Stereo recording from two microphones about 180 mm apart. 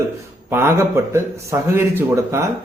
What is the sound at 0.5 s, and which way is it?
Speech, 15° right (ahead or behind).